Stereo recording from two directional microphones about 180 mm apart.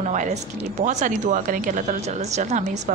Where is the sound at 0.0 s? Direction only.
40° right (ahead or behind).